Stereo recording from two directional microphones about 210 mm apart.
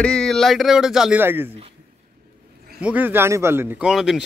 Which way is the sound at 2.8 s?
10° right (ahead or behind).